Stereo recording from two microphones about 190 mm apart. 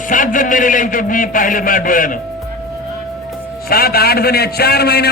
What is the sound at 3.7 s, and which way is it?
A man's voice, 55° left (ahead or behind).